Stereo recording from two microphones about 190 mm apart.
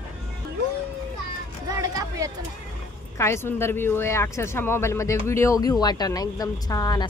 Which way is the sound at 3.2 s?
15° left (ahead or behind).